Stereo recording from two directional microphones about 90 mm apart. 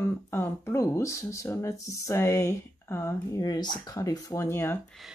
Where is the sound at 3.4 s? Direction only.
45° left (ahead or behind); by 4.8 s 25° left (ahead or behind).